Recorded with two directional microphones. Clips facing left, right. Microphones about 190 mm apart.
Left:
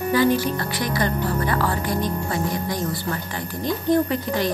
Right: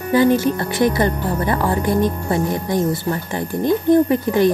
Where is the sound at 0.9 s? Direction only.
20° right (ahead or behind).